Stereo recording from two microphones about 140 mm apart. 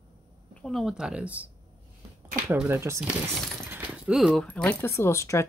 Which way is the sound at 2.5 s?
15° right (ahead or behind).